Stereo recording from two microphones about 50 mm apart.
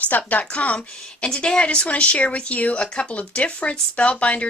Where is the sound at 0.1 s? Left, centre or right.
Left.